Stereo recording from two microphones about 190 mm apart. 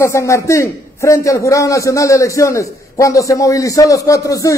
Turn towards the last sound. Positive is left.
turn(degrees=15)  # may be behind; listen again after turning